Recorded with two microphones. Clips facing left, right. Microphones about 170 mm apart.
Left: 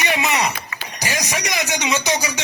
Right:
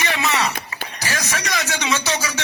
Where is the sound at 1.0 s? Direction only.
15° left (ahead or behind).